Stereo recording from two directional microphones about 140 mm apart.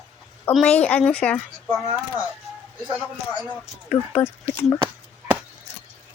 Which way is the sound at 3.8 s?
10° left (ahead or behind).